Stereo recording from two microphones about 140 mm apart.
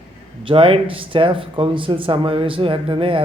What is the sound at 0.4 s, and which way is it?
A man's voice, 40° right (ahead or behind).